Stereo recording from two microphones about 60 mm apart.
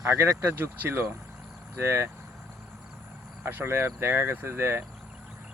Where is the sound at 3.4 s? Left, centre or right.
Right.